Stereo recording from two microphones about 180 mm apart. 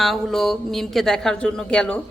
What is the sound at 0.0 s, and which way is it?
A woman's voice, centre (ahead or behind).